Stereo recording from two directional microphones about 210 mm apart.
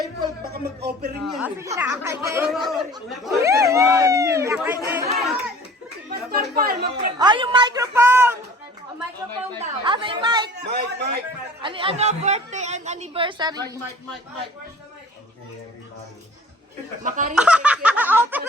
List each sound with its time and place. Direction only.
0.5 s speech: 50° right (ahead or behind)
1.2 s speech: 5° right (ahead or behind)
2.5 s a man's voice: centre (ahead or behind)
3.2 s speech: 15° right (ahead or behind)
5.1 s music: centre (ahead or behind)
6.6 s speech: 45° right (ahead or behind)
7.2 s a woman's voice: 20° right (ahead or behind)
9.6 s a woman's voice: 25° right (ahead or behind)
10.6 s speech: 50° right (ahead or behind)
11.6 s a woman's voice: 25° right (ahead or behind)
17.0 s a woman's voice: 35° right (ahead or behind)
17.3 s speech: 5° right (ahead or behind)